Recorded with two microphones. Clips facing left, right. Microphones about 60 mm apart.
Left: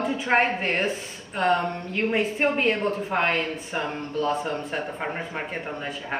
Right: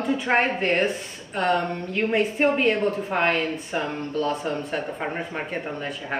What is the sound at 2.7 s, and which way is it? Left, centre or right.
Speech, left.